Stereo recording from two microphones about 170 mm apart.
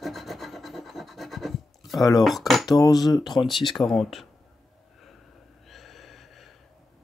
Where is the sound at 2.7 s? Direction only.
20° left (ahead or behind).